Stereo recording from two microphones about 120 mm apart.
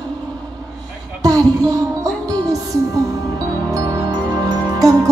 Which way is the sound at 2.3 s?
30° right (ahead or behind).